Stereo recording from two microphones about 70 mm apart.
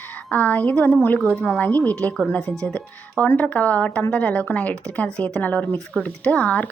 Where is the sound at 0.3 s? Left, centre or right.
Left.